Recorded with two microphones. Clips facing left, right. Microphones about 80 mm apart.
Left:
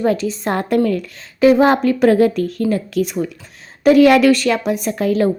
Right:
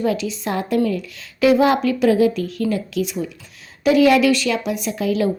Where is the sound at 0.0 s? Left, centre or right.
Left.